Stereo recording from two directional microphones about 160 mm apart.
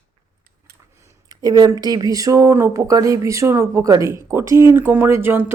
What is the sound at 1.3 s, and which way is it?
Speech, 25° right (ahead or behind).